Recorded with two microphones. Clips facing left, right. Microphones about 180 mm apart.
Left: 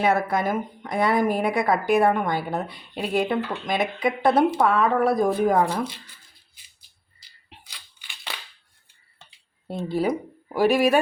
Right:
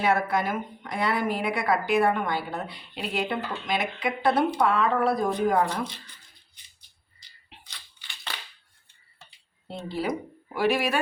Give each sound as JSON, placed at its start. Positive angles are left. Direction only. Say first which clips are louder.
{"t": 0.0, "sound": "speech", "louder": "left 3 dB", "side_deg": 45}
{"t": 5.6, "sound": "speech", "louder": "left 4 dB", "side_deg": 10}
{"t": 9.6, "sound": "speech", "louder": "left 5 dB", "side_deg": 50}